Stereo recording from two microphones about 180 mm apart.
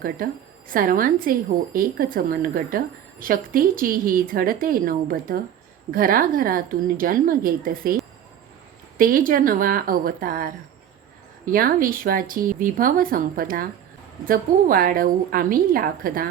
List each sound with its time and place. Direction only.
0.7 s a woman's voice: 50° right (ahead or behind)
9.0 s a woman's voice: 50° right (ahead or behind)